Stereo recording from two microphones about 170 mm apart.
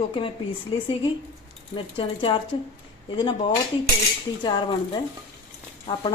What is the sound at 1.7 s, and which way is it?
Speech, 30° left (ahead or behind).